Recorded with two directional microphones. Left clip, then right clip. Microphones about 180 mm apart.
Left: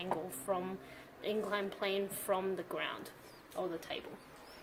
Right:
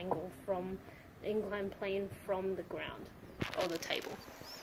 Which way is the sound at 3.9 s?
45° right (ahead or behind).